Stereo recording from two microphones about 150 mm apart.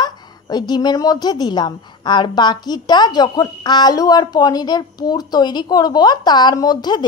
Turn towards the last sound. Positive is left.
turn(degrees=30)  # may be behind; listen again after turning